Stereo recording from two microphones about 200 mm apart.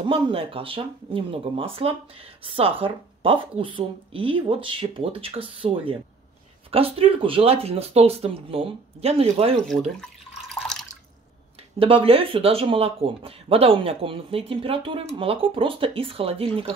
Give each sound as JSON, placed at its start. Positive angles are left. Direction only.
{"t": 0.0, "sound": "speech", "side_deg": -30}
{"t": 9.7, "sound": "water", "side_deg": 0}
{"t": 11.8, "sound": "speech", "side_deg": -25}